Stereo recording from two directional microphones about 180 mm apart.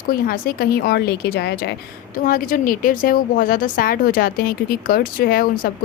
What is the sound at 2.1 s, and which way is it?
A woman's voice, 50° left (ahead or behind).